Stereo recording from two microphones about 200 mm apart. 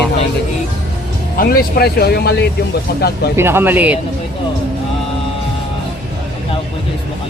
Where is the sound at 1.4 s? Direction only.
50° left (ahead or behind).